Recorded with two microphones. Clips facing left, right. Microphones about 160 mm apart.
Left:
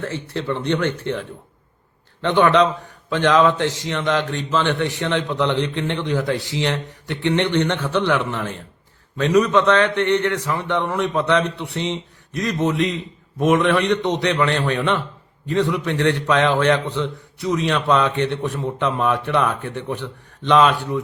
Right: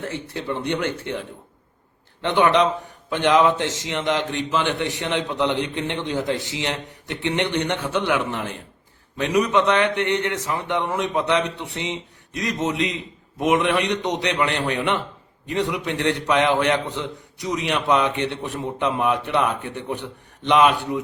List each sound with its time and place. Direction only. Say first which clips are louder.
0.0 s a man's voice: left 3 dB; 15° right (ahead or behind)
2.2 s a man's voice: left 2 dB; 15° right (ahead or behind)